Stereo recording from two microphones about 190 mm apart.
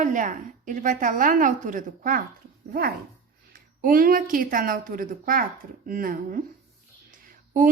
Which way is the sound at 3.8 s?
50° right (ahead or behind).